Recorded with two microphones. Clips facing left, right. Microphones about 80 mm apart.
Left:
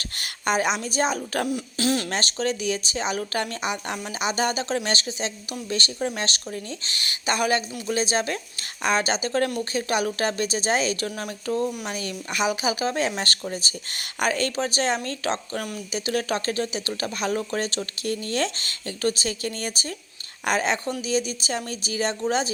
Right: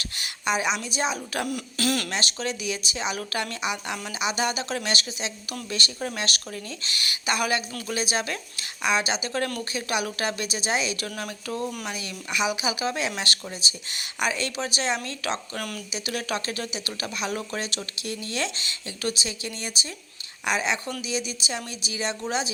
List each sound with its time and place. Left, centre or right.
0.2 s a sound: left
0.9 s speech: left
1.5 s speech: left
2.0 s speech: left
11.2 s speech: left
15.9 s speech: left